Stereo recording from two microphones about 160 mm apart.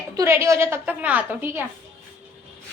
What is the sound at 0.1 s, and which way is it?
A woman's voice, 15° right (ahead or behind).